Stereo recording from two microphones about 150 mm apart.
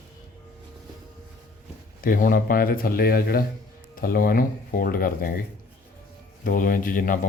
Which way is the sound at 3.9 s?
70° left (ahead or behind).